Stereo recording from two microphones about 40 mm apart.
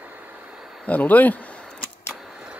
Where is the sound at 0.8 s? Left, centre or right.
Left.